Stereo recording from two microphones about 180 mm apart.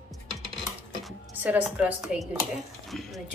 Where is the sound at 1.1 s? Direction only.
5° right (ahead or behind).